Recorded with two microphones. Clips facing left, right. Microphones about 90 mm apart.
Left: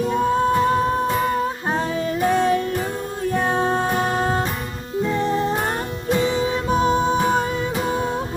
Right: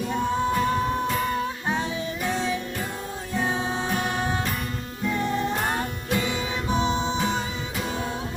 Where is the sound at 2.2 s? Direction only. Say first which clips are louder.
Left 10 dB; 55° left (ahead or behind); by 6.5 s 30° left (ahead or behind).